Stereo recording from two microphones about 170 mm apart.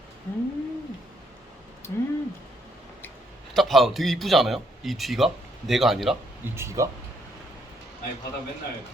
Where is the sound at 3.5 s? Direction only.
Centre (ahead or behind).